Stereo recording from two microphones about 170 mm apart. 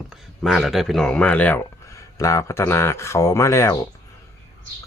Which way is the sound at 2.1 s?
20° left (ahead or behind).